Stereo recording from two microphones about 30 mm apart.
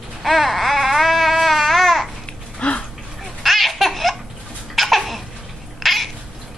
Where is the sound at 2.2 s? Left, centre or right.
Left.